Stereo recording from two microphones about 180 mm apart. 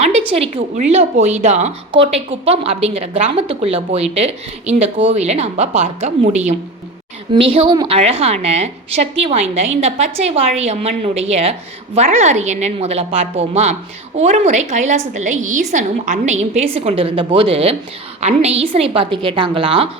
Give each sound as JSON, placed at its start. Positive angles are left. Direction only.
{"t": 0.0, "sound": "a woman's voice", "side_deg": -30}